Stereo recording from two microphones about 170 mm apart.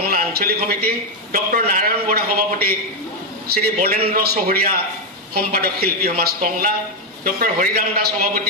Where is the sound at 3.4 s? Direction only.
65° right (ahead or behind).